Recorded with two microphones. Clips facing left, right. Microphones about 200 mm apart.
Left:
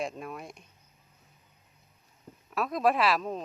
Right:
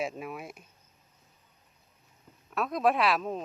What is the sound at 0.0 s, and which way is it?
Speech, 5° right (ahead or behind).